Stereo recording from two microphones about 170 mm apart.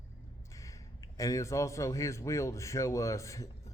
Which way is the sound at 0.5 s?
20° left (ahead or behind).